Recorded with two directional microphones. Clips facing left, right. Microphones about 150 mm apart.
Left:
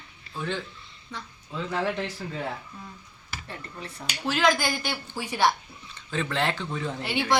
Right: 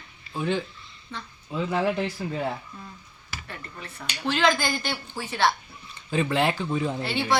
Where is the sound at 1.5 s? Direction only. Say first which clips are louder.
Right 4 dB; 10° right (ahead or behind).